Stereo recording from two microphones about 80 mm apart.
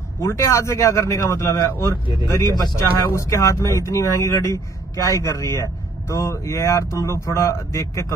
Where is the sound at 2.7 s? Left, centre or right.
Left.